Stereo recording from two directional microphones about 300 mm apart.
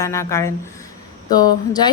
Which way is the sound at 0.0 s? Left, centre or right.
Centre.